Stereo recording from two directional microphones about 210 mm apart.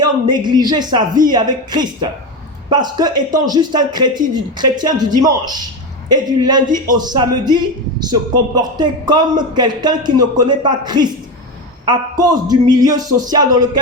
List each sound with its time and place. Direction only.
0.0 s speech: 20° right (ahead or behind)